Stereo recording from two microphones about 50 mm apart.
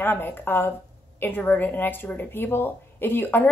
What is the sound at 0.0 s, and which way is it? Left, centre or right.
A woman's voice, left.